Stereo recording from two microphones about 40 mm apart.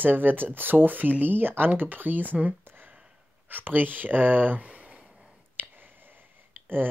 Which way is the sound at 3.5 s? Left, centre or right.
Right.